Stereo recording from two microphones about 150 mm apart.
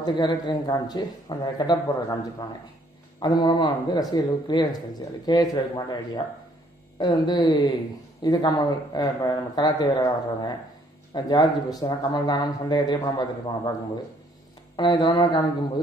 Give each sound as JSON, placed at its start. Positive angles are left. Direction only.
{"t": 0.0, "sound": "a man's voice", "side_deg": 25}
{"t": 3.2, "sound": "a man's voice", "side_deg": 30}
{"t": 14.8, "sound": "a man's voice", "side_deg": 30}